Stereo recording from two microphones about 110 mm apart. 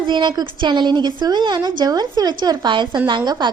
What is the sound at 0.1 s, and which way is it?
A woman's voice, 45° right (ahead or behind).